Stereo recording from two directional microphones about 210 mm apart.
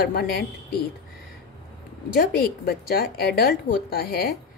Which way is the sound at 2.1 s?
45° left (ahead or behind).